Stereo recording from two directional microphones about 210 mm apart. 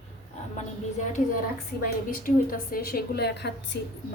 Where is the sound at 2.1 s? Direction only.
45° left (ahead or behind).